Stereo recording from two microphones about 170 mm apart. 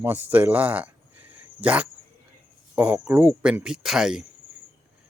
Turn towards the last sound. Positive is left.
turn(degrees=-5)  # may be behind; listen again after turning